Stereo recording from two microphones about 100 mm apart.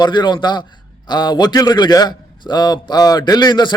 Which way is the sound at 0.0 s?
50° left (ahead or behind).